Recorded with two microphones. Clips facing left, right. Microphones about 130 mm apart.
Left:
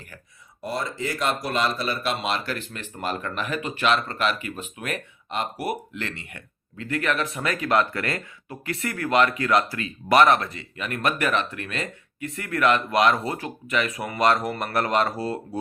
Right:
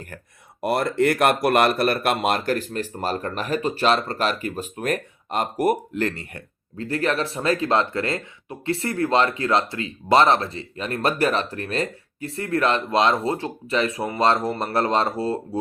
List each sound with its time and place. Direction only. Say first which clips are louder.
0.6 s speech: right 9 dB; 65° right (ahead or behind); by 15.4 s 25° right (ahead or behind)